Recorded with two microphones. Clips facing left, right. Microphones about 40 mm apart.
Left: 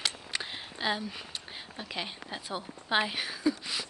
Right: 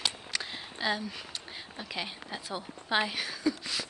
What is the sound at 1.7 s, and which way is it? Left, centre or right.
Speech, centre.